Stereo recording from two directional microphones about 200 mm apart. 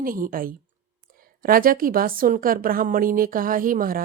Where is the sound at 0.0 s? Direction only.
45° right (ahead or behind).